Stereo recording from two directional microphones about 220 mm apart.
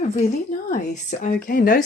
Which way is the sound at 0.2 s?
40° left (ahead or behind).